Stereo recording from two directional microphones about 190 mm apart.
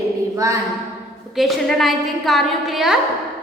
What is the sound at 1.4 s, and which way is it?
A woman's voice, centre (ahead or behind).